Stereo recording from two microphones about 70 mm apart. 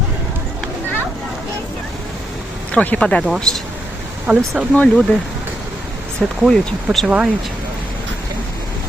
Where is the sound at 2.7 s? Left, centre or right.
Centre.